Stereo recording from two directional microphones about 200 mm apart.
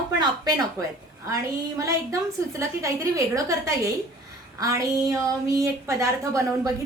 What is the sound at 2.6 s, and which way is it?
A woman's voice, 15° right (ahead or behind).